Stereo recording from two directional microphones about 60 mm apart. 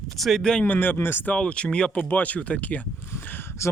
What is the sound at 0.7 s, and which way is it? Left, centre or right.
Speech, left.